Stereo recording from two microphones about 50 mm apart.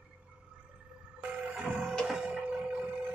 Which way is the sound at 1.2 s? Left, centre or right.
Right.